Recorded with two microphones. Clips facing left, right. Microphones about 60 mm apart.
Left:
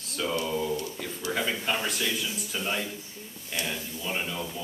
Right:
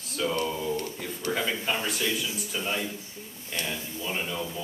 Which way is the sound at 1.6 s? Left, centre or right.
Centre.